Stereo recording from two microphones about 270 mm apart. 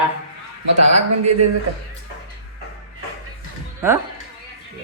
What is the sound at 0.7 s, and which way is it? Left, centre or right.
Speech, right.